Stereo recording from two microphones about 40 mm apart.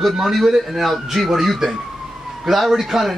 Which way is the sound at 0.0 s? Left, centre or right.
Centre.